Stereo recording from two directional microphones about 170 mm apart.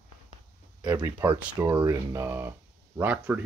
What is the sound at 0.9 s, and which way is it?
Speech, 20° right (ahead or behind).